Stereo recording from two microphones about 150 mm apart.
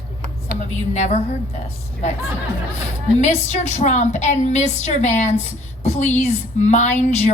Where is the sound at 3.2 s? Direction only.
50° left (ahead or behind).